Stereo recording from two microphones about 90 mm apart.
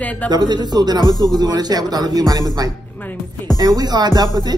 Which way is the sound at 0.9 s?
45° left (ahead or behind).